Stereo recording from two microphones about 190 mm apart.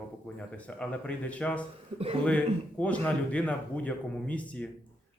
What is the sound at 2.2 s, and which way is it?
Speech, 5° left (ahead or behind).